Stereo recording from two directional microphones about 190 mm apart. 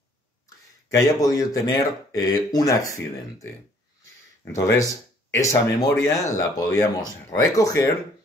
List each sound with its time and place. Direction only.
0.8 s speech: 15° left (ahead or behind)
4.5 s speech: 15° left (ahead or behind)